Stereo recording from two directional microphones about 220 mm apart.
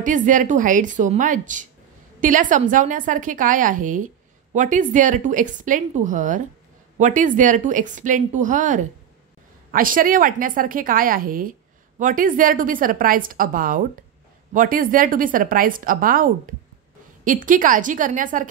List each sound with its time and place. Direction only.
0.0 s a woman's voice: 35° right (ahead or behind)